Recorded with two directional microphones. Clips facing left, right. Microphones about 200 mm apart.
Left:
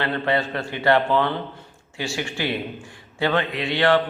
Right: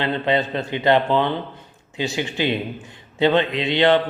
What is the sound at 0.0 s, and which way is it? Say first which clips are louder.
A man's voice: right 2 dB; 20° right (ahead or behind).